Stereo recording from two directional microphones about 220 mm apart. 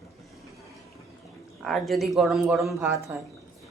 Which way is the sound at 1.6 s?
Centre (ahead or behind).